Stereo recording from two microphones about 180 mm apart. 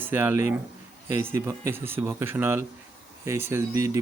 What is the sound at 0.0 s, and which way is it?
Speech, 10° right (ahead or behind).